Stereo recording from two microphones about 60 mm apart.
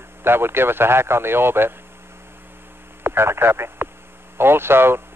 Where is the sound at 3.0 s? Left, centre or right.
Right.